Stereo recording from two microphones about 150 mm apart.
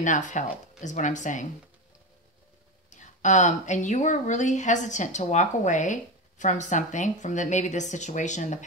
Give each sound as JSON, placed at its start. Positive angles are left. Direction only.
{"t": 0.0, "sound": "speech", "side_deg": 55}
{"t": 2.9, "sound": "speech", "side_deg": 55}